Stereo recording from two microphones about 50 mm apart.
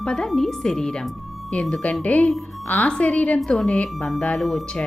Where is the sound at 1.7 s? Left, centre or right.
Left.